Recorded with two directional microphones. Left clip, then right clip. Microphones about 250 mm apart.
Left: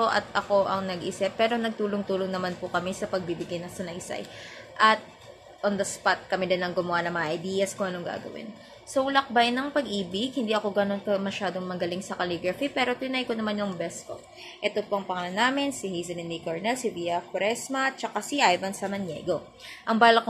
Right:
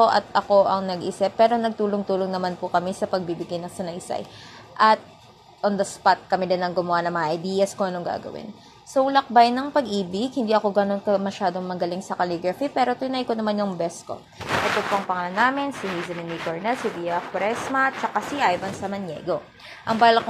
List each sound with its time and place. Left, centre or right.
0.0 s a woman's voice: right
15.0 s speech: centre